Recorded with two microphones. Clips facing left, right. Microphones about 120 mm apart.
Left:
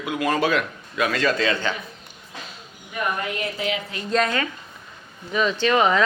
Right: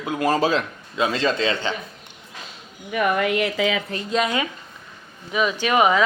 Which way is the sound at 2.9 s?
85° right.